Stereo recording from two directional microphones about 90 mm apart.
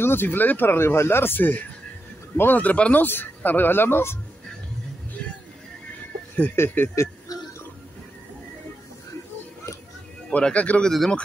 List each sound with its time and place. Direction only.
0.0 s speech: 25° left (ahead or behind)
6.5 s speech: 25° left (ahead or behind)
10.3 s speech: 15° left (ahead or behind)